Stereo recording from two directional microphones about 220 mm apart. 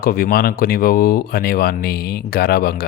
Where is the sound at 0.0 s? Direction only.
40° left (ahead or behind).